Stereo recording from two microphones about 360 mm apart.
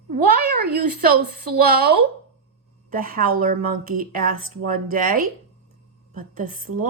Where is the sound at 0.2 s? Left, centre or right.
Right.